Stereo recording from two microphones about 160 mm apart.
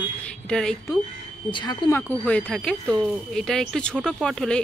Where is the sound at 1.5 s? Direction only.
30° left (ahead or behind).